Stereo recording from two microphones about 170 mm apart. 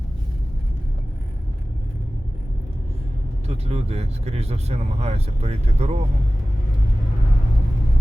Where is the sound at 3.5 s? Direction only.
40° right (ahead or behind).